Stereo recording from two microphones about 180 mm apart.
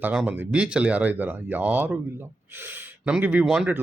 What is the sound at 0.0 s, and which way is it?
Speech, 5° right (ahead or behind).